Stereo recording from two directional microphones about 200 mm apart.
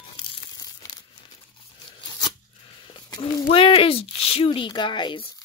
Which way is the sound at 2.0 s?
20° left (ahead or behind).